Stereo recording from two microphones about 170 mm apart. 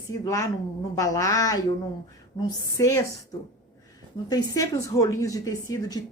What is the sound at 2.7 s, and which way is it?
Speech, 20° left (ahead or behind).